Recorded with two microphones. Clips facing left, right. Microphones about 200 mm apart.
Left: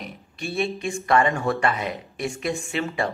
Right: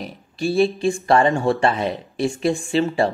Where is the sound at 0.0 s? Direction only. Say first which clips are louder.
Right 9 dB; 35° right (ahead or behind).